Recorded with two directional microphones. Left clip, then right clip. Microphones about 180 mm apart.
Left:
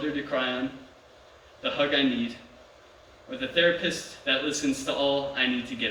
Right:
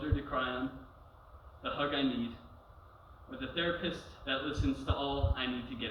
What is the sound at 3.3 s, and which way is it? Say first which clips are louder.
A man's voice: left 12 dB; 40° left (ahead or behind).